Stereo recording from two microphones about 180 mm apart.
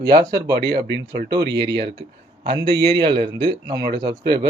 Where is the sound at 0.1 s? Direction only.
20° right (ahead or behind).